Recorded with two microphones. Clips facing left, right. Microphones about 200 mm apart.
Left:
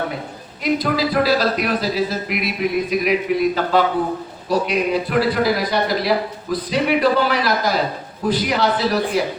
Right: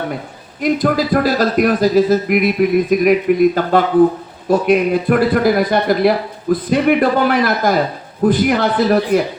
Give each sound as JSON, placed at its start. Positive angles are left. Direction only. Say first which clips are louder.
{"t": 0.6, "sound": "a man's voice", "louder": "right 4 dB", "side_deg": -50}